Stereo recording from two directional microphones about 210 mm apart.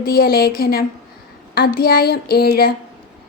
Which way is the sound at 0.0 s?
45° left (ahead or behind).